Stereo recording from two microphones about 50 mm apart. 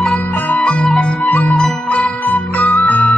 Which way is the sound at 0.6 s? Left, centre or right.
Centre.